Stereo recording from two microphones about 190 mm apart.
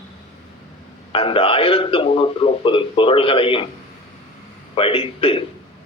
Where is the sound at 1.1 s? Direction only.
30° left (ahead or behind).